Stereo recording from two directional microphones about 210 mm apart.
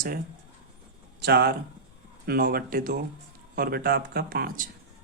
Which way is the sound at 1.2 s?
50° right (ahead or behind).